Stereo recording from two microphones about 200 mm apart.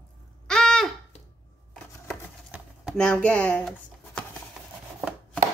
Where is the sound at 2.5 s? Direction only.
5° right (ahead or behind).